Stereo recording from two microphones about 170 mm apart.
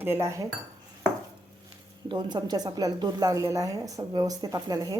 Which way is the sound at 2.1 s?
25° right (ahead or behind).